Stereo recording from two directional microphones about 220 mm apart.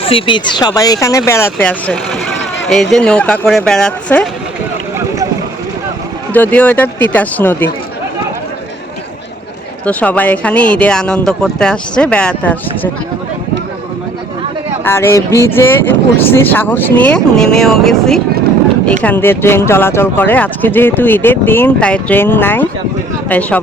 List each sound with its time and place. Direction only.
0.0 s speech: 25° left (ahead or behind); by 4.3 s 5° left (ahead or behind)
6.3 s speech: 5° left (ahead or behind)
9.8 s speech: 5° left (ahead or behind)
14.8 s speech: 10° left (ahead or behind)